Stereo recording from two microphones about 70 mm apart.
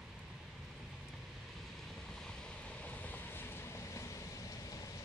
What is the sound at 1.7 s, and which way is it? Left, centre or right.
Vehicle, centre.